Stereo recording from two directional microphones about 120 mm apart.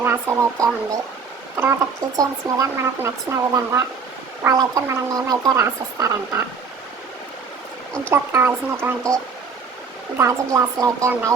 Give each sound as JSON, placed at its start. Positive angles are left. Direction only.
{"t": 0.0, "sound": "speech", "side_deg": -20}
{"t": 8.1, "sound": "speech", "side_deg": -20}
{"t": 10.2, "sound": "speech", "side_deg": -20}